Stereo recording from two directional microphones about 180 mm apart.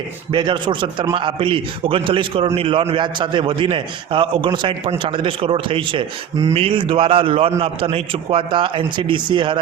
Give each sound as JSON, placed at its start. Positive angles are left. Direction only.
{"t": 0.3, "sound": "a man's voice", "side_deg": -25}